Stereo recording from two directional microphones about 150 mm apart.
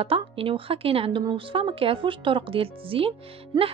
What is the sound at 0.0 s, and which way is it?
Speech, 40° right (ahead or behind).